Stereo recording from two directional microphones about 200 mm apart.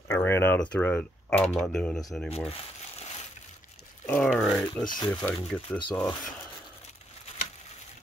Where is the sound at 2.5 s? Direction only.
30° left (ahead or behind).